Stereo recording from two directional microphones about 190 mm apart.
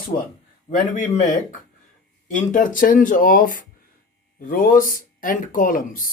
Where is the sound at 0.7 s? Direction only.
40° left (ahead or behind).